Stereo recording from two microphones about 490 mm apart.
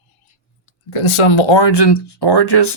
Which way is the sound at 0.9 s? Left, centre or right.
Left.